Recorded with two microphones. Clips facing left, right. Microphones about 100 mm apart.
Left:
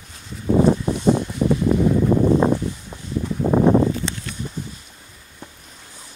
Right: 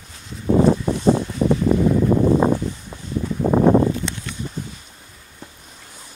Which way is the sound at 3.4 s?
20° right (ahead or behind).